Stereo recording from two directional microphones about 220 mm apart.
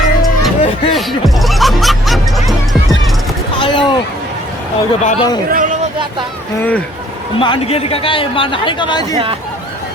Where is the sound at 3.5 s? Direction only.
20° left (ahead or behind).